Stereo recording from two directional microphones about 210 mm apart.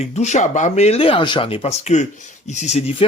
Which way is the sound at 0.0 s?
30° left (ahead or behind).